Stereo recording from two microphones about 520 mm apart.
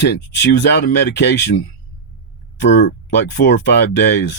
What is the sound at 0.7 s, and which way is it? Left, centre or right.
Speech, centre.